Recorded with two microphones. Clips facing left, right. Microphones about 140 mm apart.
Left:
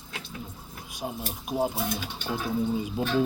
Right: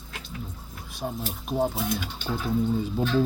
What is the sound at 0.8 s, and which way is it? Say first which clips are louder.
Speech: right 2 dB; 15° left (ahead or behind).